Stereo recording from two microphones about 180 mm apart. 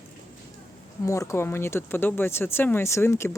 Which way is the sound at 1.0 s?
15° left (ahead or behind).